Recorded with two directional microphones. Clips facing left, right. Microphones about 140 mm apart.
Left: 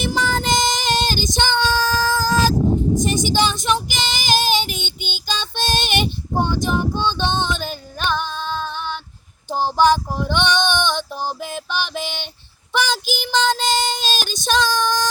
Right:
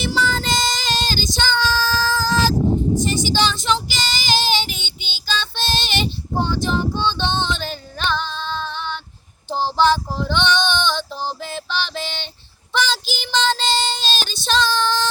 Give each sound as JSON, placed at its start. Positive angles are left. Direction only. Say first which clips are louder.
{"t": 0.1, "sound": "child singing", "louder": "left 1 dB", "side_deg": 15}
{"t": 3.8, "sound": "child singing", "louder": "left 2 dB", "side_deg": 50}
{"t": 5.2, "sound": "child singing", "louder": "right 1 dB", "side_deg": 15}
{"t": 5.5, "sound": "child singing", "louder": "left 5 dB", "side_deg": 50}
{"t": 6.4, "sound": "a sound", "louder": "left 1 dB", "side_deg": 10}
{"t": 9.5, "sound": "female singing", "louder": "left 1 dB", "side_deg": 10}
{"t": 12.7, "sound": "child singing", "louder": "left 1 dB", "side_deg": 10}